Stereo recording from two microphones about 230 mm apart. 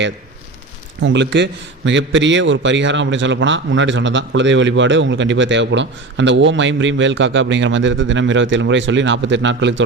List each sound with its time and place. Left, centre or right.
1.0 s a man's voice: right